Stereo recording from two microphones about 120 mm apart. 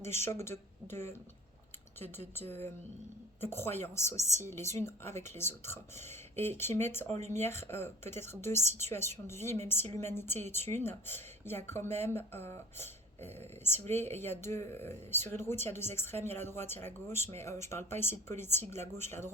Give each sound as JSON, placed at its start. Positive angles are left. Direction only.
{"t": 0.0, "sound": "speech", "side_deg": 20}
{"t": 7.1, "sound": "speech", "side_deg": -70}
{"t": 7.4, "sound": "speech", "side_deg": 20}